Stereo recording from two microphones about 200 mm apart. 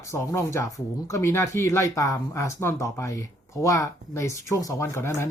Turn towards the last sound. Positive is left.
turn(degrees=15)  # may be behind; listen again after turning